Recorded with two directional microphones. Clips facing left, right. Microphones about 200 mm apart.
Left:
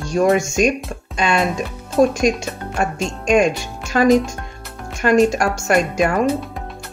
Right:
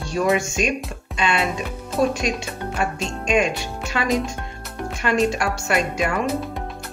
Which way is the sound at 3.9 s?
45° left (ahead or behind).